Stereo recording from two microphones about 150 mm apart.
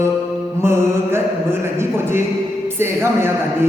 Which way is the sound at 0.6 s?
15° right (ahead or behind).